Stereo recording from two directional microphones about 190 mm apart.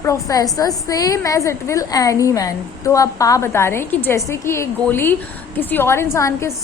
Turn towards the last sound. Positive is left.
turn(degrees=15)  # may be behind; listen again after turning